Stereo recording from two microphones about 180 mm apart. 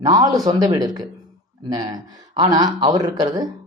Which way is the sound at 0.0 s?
20° right (ahead or behind).